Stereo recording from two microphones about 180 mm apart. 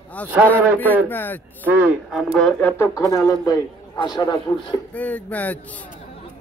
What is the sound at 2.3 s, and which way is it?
A man's voice, 5° left (ahead or behind).